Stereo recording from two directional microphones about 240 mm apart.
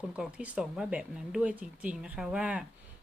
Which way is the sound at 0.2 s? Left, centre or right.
Centre.